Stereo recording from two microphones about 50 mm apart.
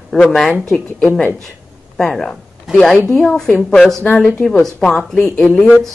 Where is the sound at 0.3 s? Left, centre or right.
Centre.